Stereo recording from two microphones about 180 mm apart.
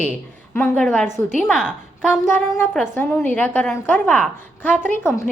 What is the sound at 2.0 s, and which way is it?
A woman's voice, 10° left (ahead or behind).